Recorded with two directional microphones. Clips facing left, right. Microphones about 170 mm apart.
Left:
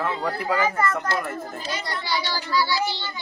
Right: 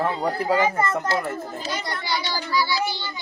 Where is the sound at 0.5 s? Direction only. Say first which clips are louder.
Left 1 dB; 20° right (ahead or behind).